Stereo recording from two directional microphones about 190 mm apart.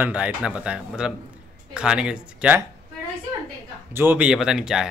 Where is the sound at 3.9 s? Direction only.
10° right (ahead or behind).